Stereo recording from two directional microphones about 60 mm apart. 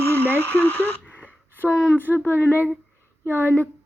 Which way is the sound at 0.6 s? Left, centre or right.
Left.